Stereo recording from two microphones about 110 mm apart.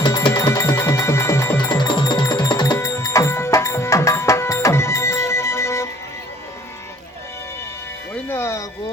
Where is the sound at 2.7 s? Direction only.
25° left (ahead or behind).